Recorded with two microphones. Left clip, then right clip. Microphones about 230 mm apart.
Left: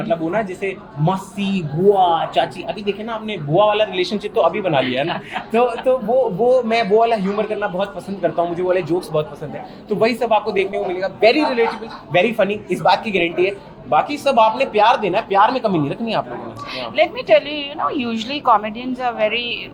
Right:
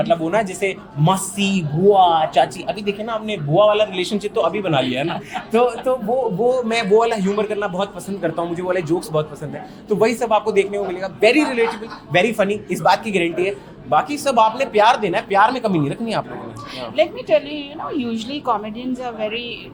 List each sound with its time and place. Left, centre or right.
0.0 s speech: right
16.8 s a woman's voice: centre